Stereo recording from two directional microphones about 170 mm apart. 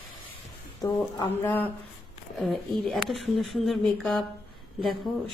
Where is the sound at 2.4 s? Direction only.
Centre (ahead or behind).